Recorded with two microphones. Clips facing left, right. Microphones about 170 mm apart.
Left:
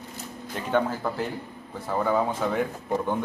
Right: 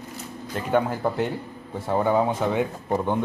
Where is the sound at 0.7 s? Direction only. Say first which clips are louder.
Right 2 dB; 20° right (ahead or behind).